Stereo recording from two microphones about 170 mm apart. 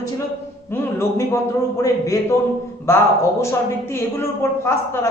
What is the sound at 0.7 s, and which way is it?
A woman's voice, 15° left (ahead or behind).